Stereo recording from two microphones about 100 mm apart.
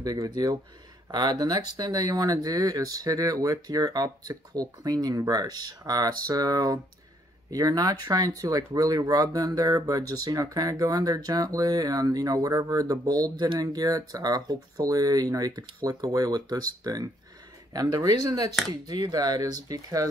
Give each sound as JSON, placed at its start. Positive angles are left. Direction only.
{"t": 0.0, "sound": "speech", "side_deg": -40}